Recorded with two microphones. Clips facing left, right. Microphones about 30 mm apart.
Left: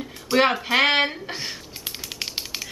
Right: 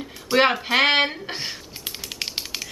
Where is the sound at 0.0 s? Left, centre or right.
Centre.